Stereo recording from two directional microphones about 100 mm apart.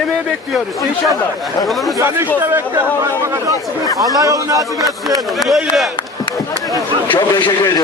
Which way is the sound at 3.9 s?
35° right (ahead or behind).